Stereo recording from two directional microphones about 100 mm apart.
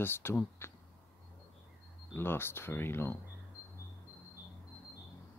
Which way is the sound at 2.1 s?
25° left (ahead or behind).